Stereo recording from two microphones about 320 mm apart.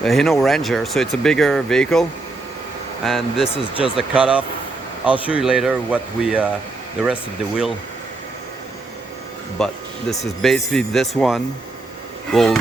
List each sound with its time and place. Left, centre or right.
0.0 s speech: centre
3.5 s speech: centre
3.9 s speech: centre
9.6 s speech: centre